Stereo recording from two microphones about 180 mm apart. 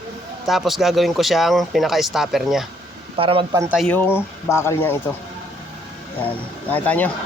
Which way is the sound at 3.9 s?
10° left (ahead or behind).